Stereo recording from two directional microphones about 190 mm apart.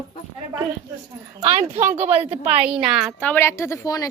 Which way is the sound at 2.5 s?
5° right (ahead or behind).